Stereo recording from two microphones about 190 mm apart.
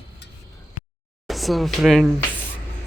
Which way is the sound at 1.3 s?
Centre (ahead or behind).